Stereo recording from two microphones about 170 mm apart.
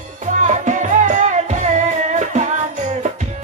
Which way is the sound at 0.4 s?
45° right (ahead or behind).